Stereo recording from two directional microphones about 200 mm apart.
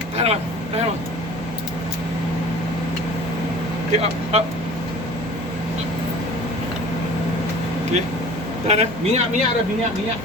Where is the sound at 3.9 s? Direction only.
30° right (ahead or behind).